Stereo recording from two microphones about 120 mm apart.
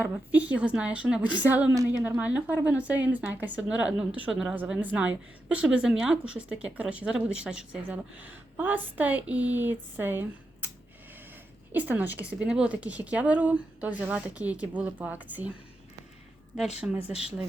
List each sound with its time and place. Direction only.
0.3 s speech: 15° right (ahead or behind)
11.7 s speech: 15° right (ahead or behind)
17.0 s speech: 55° left (ahead or behind)